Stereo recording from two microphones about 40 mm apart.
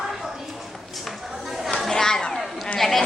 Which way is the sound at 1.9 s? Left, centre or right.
Centre.